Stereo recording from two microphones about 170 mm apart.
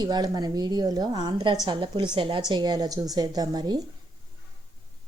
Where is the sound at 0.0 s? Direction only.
25° right (ahead or behind).